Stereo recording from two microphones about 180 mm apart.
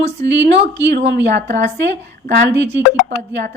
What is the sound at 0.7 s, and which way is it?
Speech, 70° right (ahead or behind).